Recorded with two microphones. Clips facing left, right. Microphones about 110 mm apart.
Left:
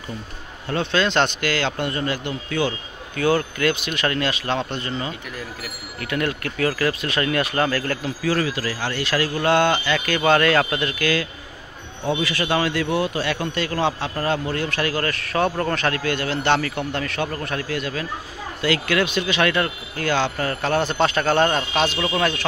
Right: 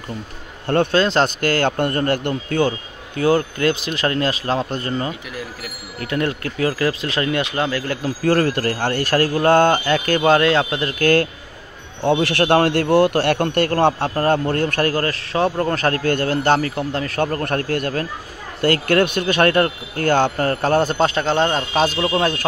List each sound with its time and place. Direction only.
0.9 s a man's voice: 40° right (ahead or behind)
3.2 s a man's voice: 30° right (ahead or behind)
5.9 s speech: 30° right (ahead or behind)
8.0 s a man's voice: 45° right (ahead or behind)
12.0 s a man's voice: 65° right (ahead or behind); by 21.6 s 25° right (ahead or behind)
21.7 s a man's voice: 35° right (ahead or behind)